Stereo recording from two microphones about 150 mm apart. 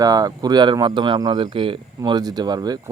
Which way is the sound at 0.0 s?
25° right (ahead or behind).